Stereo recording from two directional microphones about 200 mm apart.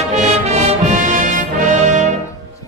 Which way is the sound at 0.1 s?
35° right (ahead or behind).